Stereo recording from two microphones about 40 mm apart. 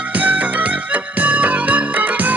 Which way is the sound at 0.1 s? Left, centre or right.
Right.